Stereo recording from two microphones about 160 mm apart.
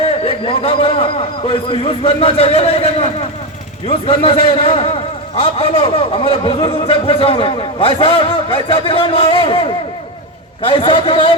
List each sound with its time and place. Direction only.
0.0 s a man's voice: 35° left (ahead or behind)